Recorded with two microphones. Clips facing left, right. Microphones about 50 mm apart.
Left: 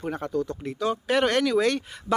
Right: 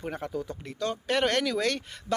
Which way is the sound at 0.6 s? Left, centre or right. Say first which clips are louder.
Left 5 dB; centre.